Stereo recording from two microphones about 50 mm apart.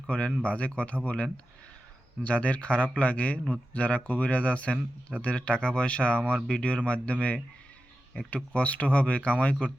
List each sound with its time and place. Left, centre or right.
0.4 s speech: left
8.5 s speech: left